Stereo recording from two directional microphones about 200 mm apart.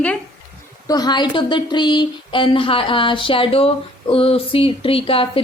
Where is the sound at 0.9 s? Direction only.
20° left (ahead or behind).